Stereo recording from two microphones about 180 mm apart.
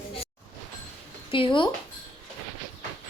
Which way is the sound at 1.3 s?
30° left (ahead or behind).